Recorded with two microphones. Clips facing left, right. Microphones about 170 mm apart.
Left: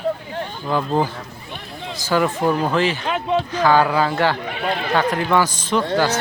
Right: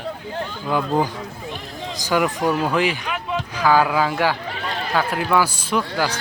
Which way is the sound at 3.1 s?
35° left (ahead or behind).